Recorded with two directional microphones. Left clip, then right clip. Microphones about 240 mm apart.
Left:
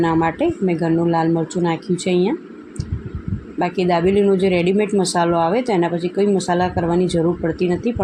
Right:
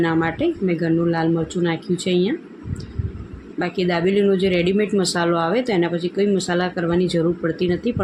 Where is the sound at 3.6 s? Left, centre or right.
Centre.